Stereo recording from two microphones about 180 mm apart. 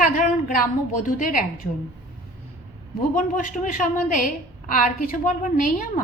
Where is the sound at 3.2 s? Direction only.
45° left (ahead or behind).